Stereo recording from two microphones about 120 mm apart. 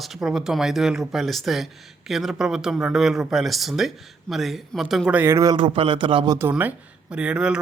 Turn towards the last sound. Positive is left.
turn(degrees=-10)  # may be behind; listen again after turning